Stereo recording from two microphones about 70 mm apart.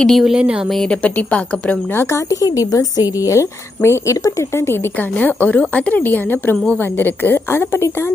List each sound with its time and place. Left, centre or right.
0.0 s speech: centre
0.3 s speech: centre
0.9 s a woman's voice: left
2.3 s a woman's voice: left
5.1 s a woman's voice: left